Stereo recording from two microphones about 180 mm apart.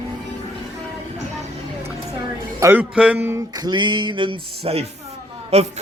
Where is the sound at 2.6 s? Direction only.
10° right (ahead or behind); by 4.4 s 25° right (ahead or behind).